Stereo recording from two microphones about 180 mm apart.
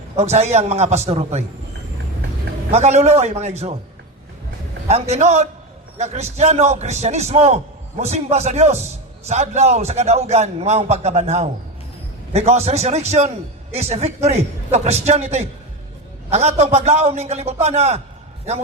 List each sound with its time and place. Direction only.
0.2 s a man's voice: 35° right (ahead or behind)
2.7 s a man's voice: 40° right (ahead or behind)
4.9 s a man's voice: 35° right (ahead or behind)